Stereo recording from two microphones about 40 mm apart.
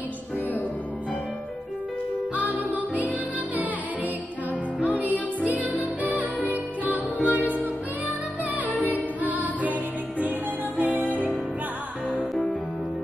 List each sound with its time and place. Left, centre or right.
2.3 s music: right
4.7 s music: right
8.9 s music: right